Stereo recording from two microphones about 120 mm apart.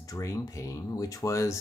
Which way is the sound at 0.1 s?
25° left (ahead or behind).